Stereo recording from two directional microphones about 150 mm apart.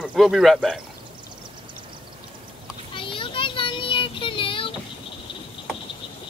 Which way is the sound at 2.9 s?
35° left (ahead or behind).